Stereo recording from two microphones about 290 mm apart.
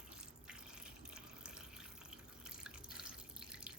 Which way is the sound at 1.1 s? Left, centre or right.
Centre.